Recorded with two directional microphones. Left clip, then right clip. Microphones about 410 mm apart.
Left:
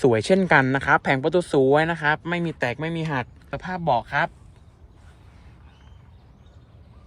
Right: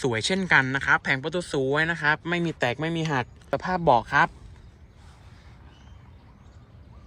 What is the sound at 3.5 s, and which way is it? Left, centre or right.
Speech, centre.